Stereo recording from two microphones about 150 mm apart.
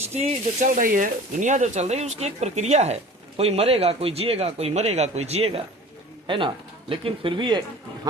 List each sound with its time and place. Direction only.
0.1 s speech: 45° right (ahead or behind)
0.7 s speech: 65° right (ahead or behind); by 7.6 s 30° right (ahead or behind)